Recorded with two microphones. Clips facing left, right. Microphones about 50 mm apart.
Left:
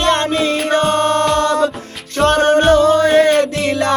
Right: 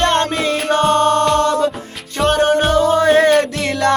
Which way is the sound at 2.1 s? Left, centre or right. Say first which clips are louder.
Left 2 dB; centre.